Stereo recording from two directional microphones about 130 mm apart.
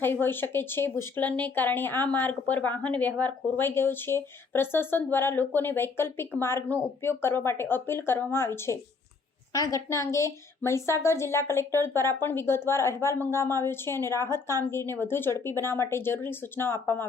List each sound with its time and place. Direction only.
0.0 s a woman's voice: 15° left (ahead or behind)